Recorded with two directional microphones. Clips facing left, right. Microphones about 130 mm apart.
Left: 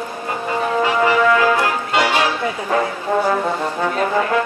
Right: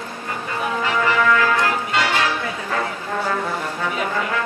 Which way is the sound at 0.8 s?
20° left (ahead or behind).